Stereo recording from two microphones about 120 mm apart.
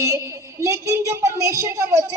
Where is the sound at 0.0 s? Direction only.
25° right (ahead or behind).